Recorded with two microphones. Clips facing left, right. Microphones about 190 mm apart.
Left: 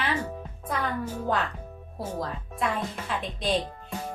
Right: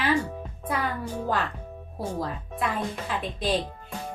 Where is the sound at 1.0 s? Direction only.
10° left (ahead or behind).